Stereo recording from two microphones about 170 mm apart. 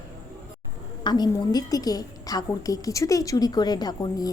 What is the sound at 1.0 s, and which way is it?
A woman's voice, 25° left (ahead or behind).